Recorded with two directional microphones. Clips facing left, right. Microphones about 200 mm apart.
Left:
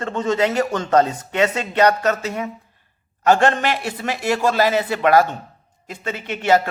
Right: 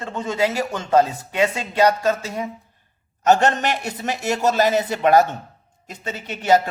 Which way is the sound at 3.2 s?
20° right (ahead or behind).